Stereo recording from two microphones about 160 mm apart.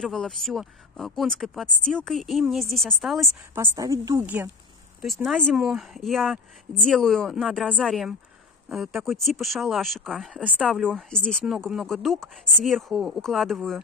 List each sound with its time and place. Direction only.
0.0 s speech: 5° left (ahead or behind)
3.5 s a woman's voice: 20° right (ahead or behind)
5.0 s speech: centre (ahead or behind)